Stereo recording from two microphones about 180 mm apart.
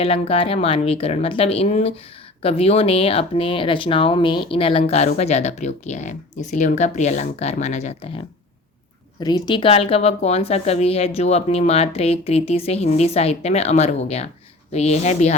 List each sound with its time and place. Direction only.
0.0 s speech: 30° left (ahead or behind)
9.2 s speech: 25° left (ahead or behind)